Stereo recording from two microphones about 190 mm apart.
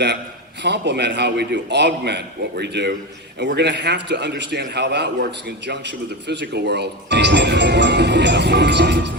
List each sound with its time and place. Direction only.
0.6 s a man's voice: 65° right (ahead or behind)